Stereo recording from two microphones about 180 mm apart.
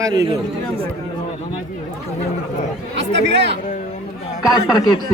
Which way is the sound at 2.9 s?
85° right.